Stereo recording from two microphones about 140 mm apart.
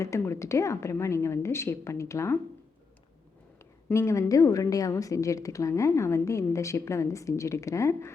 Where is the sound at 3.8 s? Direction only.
20° left (ahead or behind).